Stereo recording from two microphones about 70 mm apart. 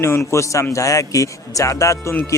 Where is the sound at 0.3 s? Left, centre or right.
Left.